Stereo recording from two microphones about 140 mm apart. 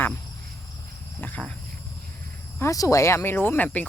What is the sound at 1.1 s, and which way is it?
Speech, 10° left (ahead or behind).